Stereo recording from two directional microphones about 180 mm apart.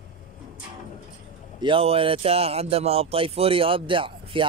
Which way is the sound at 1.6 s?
30° right (ahead or behind).